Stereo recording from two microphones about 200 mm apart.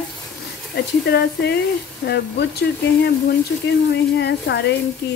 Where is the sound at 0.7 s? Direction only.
55° left (ahead or behind).